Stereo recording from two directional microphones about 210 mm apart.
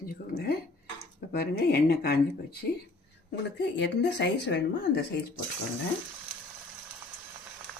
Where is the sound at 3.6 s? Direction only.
55° left (ahead or behind).